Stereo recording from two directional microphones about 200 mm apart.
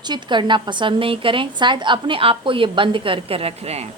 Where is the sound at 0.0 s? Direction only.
20° right (ahead or behind).